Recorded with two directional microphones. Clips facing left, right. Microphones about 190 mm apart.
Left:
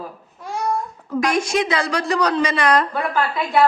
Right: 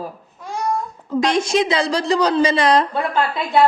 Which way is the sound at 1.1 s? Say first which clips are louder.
Right 2 dB; 20° right (ahead or behind).